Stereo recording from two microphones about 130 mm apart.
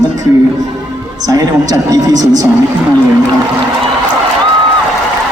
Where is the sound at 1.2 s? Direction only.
30° right (ahead or behind).